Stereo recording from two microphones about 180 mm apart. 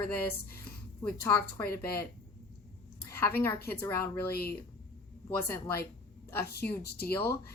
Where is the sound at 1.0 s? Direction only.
10° left (ahead or behind).